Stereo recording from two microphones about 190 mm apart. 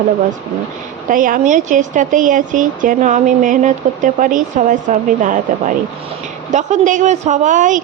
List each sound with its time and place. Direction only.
1.0 s a woman's voice: 45° right (ahead or behind)